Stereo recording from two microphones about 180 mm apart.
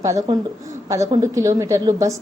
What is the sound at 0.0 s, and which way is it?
A woman's voice, 15° right (ahead or behind).